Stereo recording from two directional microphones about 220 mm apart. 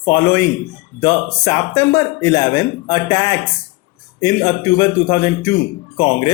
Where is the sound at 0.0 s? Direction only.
15° left (ahead or behind).